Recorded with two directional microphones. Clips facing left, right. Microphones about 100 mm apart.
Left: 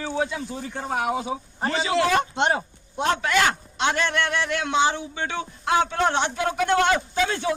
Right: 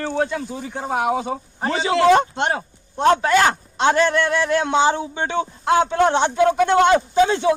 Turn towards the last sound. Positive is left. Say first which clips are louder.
# right 8 dB
turn(degrees=-25)  # may be behind; listen again after turning